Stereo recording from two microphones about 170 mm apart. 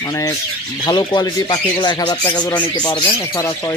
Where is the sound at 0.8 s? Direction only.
25° left (ahead or behind).